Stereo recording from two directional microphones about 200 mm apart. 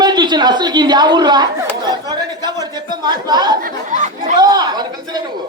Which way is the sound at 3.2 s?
20° right (ahead or behind).